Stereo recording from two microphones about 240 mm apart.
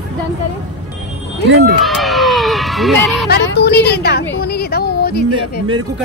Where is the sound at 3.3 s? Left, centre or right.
Left.